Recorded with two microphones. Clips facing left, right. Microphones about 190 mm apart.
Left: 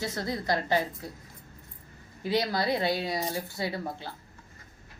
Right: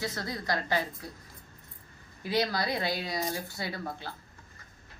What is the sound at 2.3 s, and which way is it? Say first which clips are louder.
Speech: left 2 dB; 25° left (ahead or behind).